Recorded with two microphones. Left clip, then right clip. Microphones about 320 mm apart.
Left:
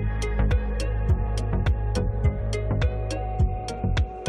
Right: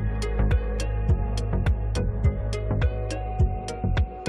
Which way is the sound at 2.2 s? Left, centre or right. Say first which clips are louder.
Left 1 dB; centre.